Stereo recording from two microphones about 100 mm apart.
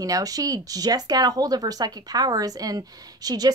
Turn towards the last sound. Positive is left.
turn(degrees=-40)  # may be behind; listen again after turning